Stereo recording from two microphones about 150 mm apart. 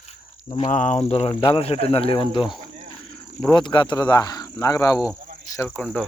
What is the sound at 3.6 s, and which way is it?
Speech, 30° left (ahead or behind).